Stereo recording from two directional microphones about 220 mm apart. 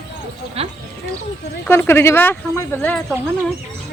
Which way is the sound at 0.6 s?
25° right (ahead or behind).